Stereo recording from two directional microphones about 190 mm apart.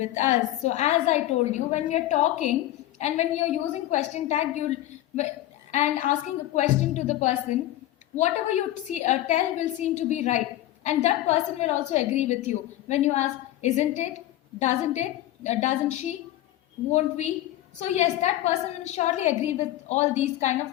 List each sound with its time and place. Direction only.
0.0 s a woman's voice: 40° left (ahead or behind)
5.7 s a woman's voice: 40° left (ahead or behind)